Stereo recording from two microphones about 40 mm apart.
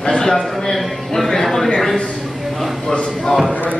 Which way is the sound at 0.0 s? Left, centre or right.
Centre.